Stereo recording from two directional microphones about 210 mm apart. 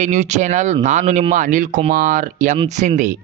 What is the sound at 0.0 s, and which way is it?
Speech, 35° right (ahead or behind).